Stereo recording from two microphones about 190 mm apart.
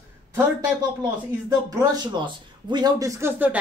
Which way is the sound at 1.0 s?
20° right (ahead or behind).